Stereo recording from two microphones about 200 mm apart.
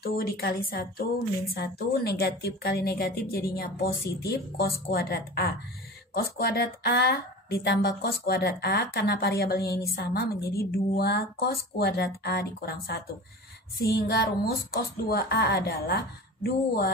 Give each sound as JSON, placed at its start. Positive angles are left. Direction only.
{"t": 0.0, "sound": "a woman's voice", "side_deg": 50}